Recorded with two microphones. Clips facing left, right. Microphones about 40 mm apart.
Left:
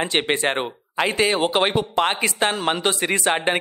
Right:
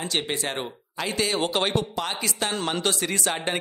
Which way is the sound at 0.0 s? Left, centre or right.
Left.